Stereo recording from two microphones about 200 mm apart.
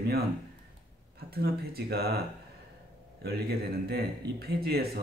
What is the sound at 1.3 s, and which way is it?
Speech, 50° right (ahead or behind).